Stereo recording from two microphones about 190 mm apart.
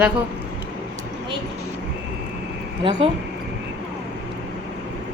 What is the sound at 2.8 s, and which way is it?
Speech, 30° right (ahead or behind).